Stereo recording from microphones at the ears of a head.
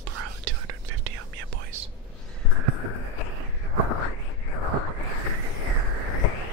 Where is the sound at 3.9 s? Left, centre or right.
Left.